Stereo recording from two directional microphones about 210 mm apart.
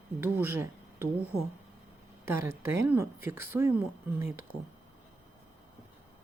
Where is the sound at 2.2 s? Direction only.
10° right (ahead or behind).